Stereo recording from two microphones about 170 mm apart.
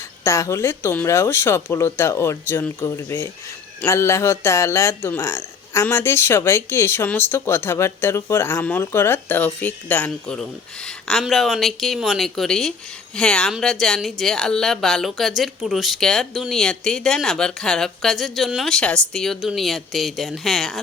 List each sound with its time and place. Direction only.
0.3 s speech: 15° left (ahead or behind); by 20.7 s centre (ahead or behind)